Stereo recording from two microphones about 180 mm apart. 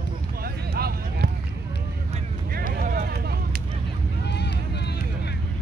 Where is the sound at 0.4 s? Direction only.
60° right (ahead or behind).